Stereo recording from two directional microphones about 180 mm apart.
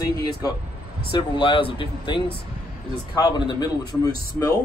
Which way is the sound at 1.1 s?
30° left (ahead or behind).